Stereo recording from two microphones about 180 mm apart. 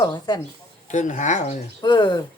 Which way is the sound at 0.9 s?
45° left (ahead or behind).